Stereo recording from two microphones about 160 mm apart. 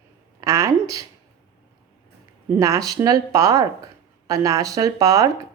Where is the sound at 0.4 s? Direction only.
20° right (ahead or behind).